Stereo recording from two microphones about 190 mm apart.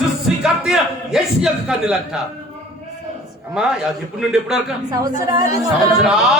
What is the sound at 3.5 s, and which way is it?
A man's voice, 5° right (ahead or behind).